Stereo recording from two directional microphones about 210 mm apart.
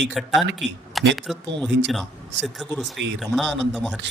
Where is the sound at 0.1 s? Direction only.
Centre (ahead or behind).